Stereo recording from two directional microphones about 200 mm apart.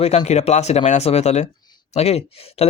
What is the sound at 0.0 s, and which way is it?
A man's voice, 35° left (ahead or behind).